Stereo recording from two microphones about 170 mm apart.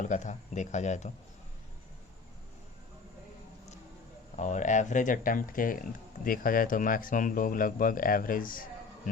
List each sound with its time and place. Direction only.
0.0 s speech: 45° left (ahead or behind)
4.4 s speech: 45° left (ahead or behind)